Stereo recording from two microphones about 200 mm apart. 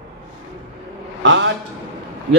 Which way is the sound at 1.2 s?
65° right (ahead or behind).